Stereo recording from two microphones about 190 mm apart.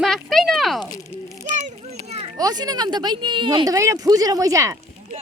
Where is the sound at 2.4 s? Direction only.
20° right (ahead or behind).